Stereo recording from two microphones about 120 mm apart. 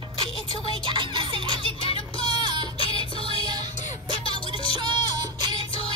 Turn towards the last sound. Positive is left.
turn(degrees=50)  # may be behind; listen again after turning